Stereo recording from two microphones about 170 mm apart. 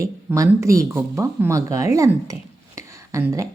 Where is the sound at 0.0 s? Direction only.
15° right (ahead or behind).